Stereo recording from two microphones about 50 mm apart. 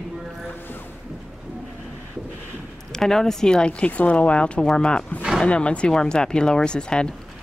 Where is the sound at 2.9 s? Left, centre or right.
Centre.